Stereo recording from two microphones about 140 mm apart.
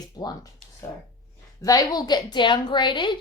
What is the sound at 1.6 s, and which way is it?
A woman's voice, 25° left (ahead or behind).